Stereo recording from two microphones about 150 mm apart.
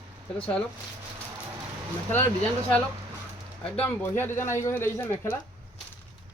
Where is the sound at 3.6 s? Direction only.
10° left (ahead or behind).